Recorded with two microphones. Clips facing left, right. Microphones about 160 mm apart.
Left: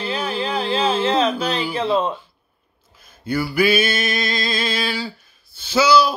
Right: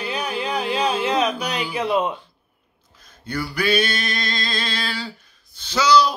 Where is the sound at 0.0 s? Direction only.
25° left (ahead or behind).